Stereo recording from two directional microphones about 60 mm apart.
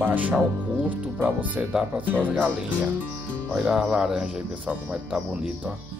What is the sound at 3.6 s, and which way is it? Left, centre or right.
Speech, centre.